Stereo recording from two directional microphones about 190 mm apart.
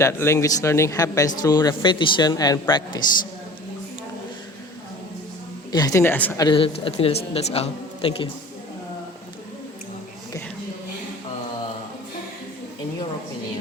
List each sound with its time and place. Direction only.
0.0 s a man's voice: 15° left (ahead or behind)
5.7 s speech: 15° left (ahead or behind)
6.4 s a man's voice: 25° left (ahead or behind)